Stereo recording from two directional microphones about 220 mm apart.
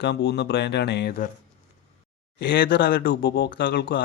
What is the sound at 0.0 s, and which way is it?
Speech, 50° left (ahead or behind).